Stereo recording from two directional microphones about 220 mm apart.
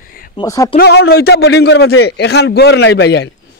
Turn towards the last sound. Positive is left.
turn(degrees=50)  # may be behind; listen again after turning